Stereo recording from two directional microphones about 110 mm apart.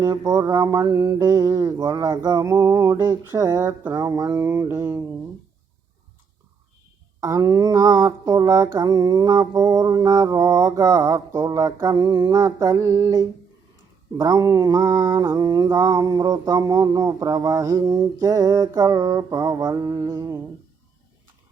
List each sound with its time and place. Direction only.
0.0 s mantra: 35° right (ahead or behind)
7.2 s mantra: 30° right (ahead or behind)